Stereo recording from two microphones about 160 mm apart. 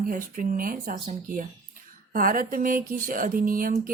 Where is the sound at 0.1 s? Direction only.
60° right (ahead or behind).